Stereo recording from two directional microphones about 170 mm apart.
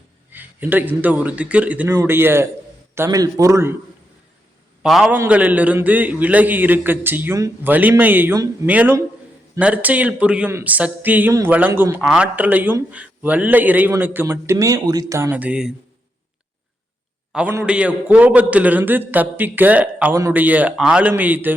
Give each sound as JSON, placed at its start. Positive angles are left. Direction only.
{"t": 0.3, "sound": "speech", "side_deg": -10}
{"t": 4.8, "sound": "a man's voice", "side_deg": -5}
{"t": 17.3, "sound": "speech", "side_deg": -10}